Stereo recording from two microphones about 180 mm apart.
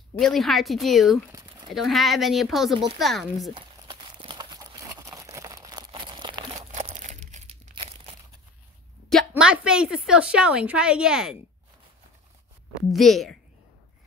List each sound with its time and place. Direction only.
0.1 s a woman's voice: centre (ahead or behind)
1.3 s a sound: 25° right (ahead or behind)
1.7 s a woman's voice: centre (ahead or behind)
3.5 s horse: 25° right (ahead or behind)
5.1 s crumpling: 20° right (ahead or behind)
6.7 s crumpling: 40° right (ahead or behind)
9.3 s a woman's voice: 5° right (ahead or behind)
12.9 s a woman's voice: centre (ahead or behind)